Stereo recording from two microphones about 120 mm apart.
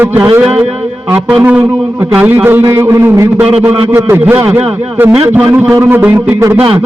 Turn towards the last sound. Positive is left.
turn(degrees=-20)  # may be behind; listen again after turning